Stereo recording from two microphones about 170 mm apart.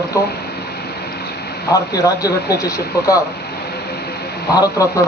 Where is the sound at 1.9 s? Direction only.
20° left (ahead or behind).